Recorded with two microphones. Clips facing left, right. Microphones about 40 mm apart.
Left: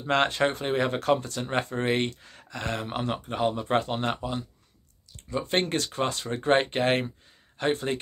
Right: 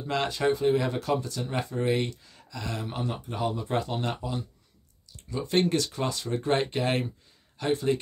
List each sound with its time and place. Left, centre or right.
0.0 s speech: left